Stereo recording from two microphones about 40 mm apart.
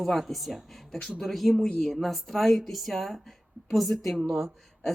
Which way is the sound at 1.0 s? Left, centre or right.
Centre.